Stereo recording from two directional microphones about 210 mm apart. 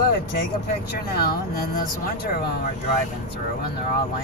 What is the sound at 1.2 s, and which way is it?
Speech, 45° left (ahead or behind).